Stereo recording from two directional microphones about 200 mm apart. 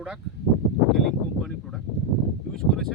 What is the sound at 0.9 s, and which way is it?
Speech, centre (ahead or behind).